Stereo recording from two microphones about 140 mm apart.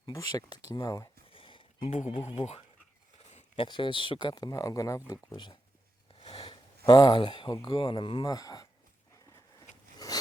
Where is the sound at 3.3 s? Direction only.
50° left (ahead or behind).